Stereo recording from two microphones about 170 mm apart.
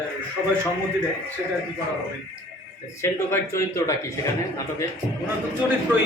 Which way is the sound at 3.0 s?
15° left (ahead or behind).